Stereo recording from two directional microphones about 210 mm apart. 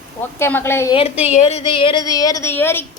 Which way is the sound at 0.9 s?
25° left (ahead or behind).